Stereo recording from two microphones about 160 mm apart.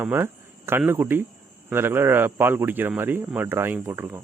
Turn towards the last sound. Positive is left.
turn(degrees=-15)  # may be behind; listen again after turning